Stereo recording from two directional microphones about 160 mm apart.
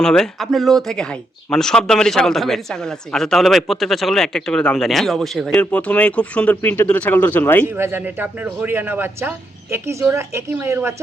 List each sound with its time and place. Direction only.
0.0 s speech: 5° left (ahead or behind)
7.6 s a woman's voice: 15° right (ahead or behind)